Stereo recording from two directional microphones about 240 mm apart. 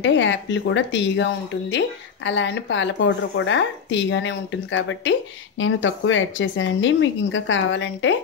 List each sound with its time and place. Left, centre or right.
0.0 s speech: left